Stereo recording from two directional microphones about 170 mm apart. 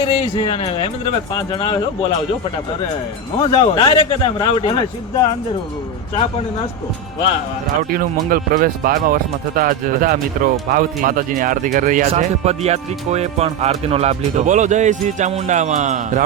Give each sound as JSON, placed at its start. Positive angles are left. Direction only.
{"t": 0.0, "sound": "speech", "side_deg": 35}
{"t": 3.4, "sound": "a man's voice", "side_deg": 30}
{"t": 7.8, "sound": "speech", "side_deg": -60}